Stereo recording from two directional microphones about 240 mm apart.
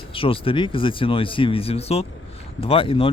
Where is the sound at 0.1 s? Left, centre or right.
Left.